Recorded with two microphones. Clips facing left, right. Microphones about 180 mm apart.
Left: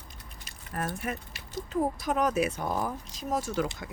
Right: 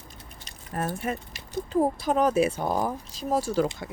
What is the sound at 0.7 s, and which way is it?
Speech, 25° right (ahead or behind).